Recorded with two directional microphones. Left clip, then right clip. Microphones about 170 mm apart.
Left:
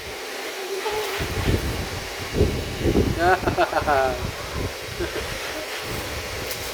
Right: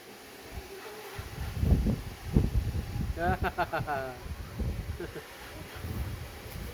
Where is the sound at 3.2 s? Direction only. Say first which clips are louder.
Left 9 dB; 5° left (ahead or behind).